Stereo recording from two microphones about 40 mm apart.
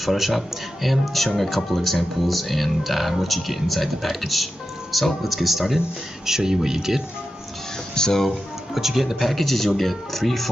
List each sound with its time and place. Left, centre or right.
0.0 s speech: centre
7.9 s speech: centre
8.3 s speech: centre